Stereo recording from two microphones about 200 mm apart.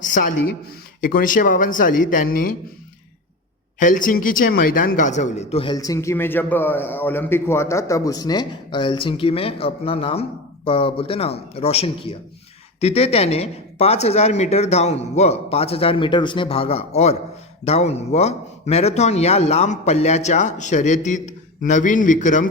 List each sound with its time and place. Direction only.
1.0 s speech: 40° left (ahead or behind)
3.8 s a man's voice: 40° left (ahead or behind)